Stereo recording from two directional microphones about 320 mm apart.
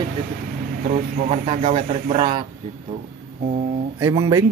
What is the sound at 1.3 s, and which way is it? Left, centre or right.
Speech, centre.